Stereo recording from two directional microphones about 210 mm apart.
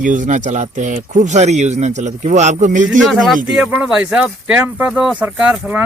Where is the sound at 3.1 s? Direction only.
Centre (ahead or behind).